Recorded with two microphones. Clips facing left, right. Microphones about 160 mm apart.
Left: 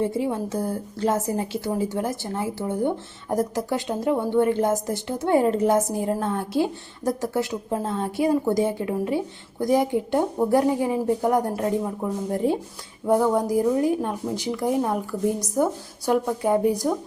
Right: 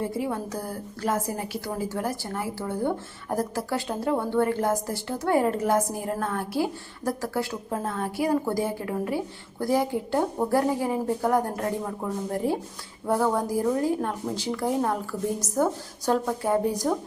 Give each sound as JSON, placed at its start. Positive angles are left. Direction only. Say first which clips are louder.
{"t": 0.0, "sound": "a woman's voice", "louder": "left 4 dB", "side_deg": 25}
{"t": 16.0, "sound": "a woman's voice", "louder": "left 3 dB", "side_deg": 15}